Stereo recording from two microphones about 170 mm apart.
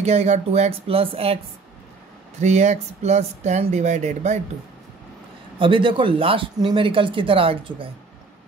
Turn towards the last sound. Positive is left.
turn(degrees=-30)  # may be behind; listen again after turning